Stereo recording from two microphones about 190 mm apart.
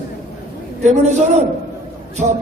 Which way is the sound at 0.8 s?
35° right (ahead or behind).